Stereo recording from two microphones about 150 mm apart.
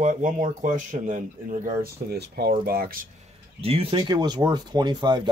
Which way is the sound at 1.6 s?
90° right.